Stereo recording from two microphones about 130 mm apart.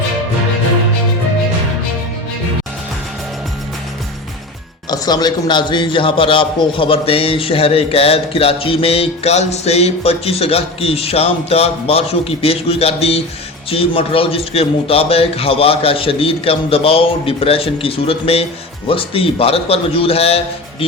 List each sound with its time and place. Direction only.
4.9 s a man's voice: 30° left (ahead or behind); by 20.8 s 50° left (ahead or behind)